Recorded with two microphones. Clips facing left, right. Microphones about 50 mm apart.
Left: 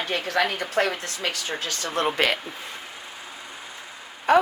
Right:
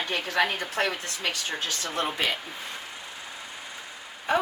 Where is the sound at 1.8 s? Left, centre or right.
Left.